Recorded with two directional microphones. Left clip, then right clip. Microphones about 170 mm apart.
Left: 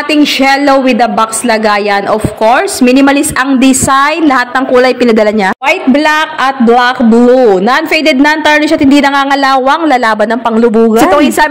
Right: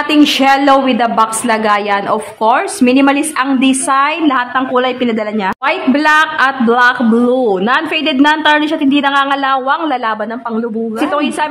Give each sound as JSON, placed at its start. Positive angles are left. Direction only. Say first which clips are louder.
{"t": 0.1, "sound": "a woman's voice", "louder": "left 2 dB", "side_deg": 15}
{"t": 5.7, "sound": "a woman's voice", "louder": "left 2 dB", "side_deg": 15}